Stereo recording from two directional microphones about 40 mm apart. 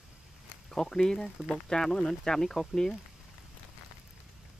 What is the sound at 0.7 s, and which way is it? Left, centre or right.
Speech, centre.